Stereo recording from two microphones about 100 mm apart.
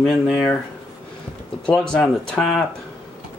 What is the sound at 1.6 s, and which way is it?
Speech, 10° left (ahead or behind).